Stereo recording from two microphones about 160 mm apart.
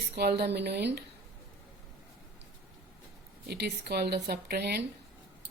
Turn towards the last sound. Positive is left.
turn(degrees=-80)